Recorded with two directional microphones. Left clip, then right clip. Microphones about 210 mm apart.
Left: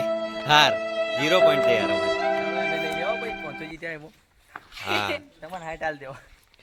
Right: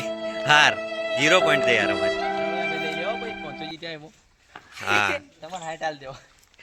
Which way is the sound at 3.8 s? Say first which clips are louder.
Left 1 dB; 5° left (ahead or behind).